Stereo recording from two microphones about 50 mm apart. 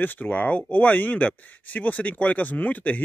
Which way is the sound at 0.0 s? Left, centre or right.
Left.